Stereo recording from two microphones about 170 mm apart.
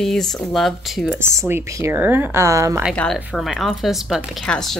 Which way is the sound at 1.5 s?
15° right (ahead or behind).